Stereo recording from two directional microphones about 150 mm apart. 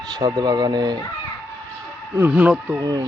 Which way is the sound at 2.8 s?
25° right (ahead or behind).